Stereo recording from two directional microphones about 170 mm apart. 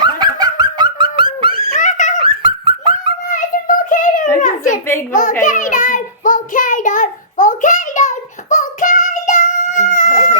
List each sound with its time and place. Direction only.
0.0 s dog: 25° right (ahead or behind)
1.7 s giggle: 45° left (ahead or behind)
2.2 s dog: 30° right (ahead or behind)
3.2 s child singing: 50° left (ahead or behind)
4.4 s a sound: 50° left (ahead or behind)
5.1 s child singing: 50° left (ahead or behind)